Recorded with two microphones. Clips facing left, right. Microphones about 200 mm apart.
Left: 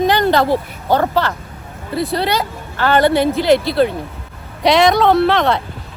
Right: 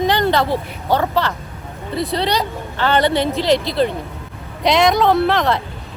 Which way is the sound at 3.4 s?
5° left (ahead or behind).